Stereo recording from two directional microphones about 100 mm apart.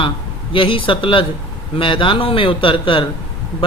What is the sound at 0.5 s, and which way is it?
Speech, 60° left (ahead or behind).